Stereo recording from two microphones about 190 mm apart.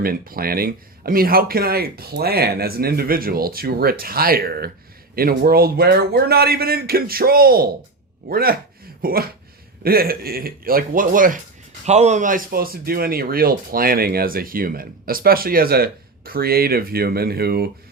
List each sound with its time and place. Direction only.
0.0 s speech: 50° right (ahead or behind)